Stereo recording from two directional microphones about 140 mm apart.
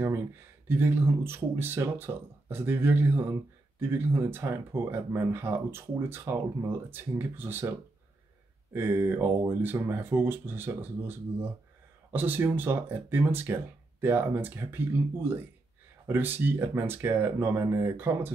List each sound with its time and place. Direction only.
0.7 s speech: 15° right (ahead or behind)
8.7 s speech: 15° right (ahead or behind)